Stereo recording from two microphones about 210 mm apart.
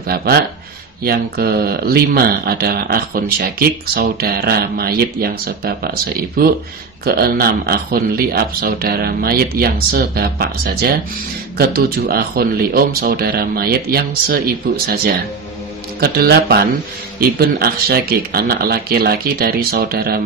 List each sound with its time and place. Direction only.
0.0 s speech: 45° right (ahead or behind)
16.0 s speech: 50° right (ahead or behind)